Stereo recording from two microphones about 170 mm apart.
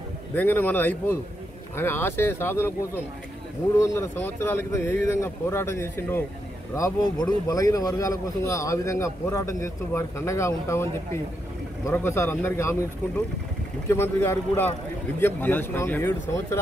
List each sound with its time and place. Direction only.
0.3 s speech: 10° left (ahead or behind)
13.8 s speech: 15° left (ahead or behind)